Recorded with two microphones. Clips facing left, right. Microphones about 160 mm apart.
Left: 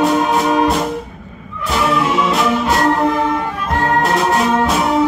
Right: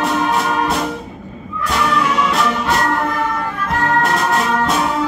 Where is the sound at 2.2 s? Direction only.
Centre (ahead or behind).